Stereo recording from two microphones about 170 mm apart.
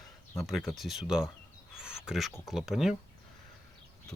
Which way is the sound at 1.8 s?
5° right (ahead or behind).